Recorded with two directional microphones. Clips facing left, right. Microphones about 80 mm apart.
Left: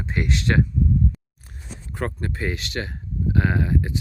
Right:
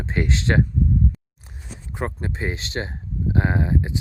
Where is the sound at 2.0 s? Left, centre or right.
Centre.